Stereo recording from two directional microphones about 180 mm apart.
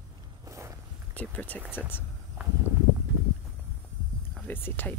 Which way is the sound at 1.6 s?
10° right (ahead or behind).